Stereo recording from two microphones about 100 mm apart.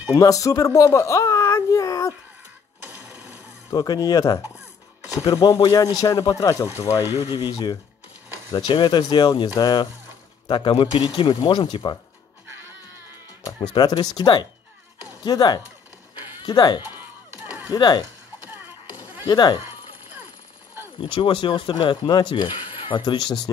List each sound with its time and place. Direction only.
0.1 s speech: 35° left (ahead or behind)
3.7 s speech: 40° left (ahead or behind)
7.2 s speech: 45° left (ahead or behind)
10.5 s speech: 55° left (ahead or behind)
13.6 s speech: 45° left (ahead or behind)
19.2 s speech: 45° left (ahead or behind)
21.1 s speech: 60° left (ahead or behind)